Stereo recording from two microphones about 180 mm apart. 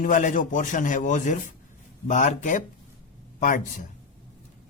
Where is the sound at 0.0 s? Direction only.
45° left (ahead or behind).